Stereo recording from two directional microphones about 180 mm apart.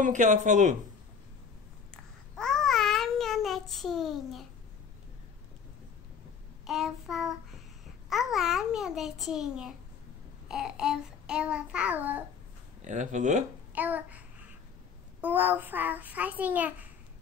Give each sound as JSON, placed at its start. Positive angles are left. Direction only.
{"t": 0.0, "sound": "speech", "side_deg": -45}
{"t": 2.3, "sound": "child singing", "side_deg": 5}
{"t": 6.6, "sound": "babbling", "side_deg": 0}
{"t": 12.8, "sound": "speech", "side_deg": -45}
{"t": 13.7, "sound": "a sound", "side_deg": -10}
{"t": 15.1, "sound": "a child's voice", "side_deg": -10}